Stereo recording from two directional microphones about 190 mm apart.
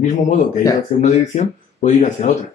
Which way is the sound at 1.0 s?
40° left (ahead or behind).